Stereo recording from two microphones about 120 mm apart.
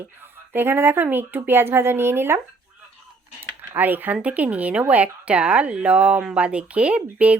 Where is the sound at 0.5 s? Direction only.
20° right (ahead or behind).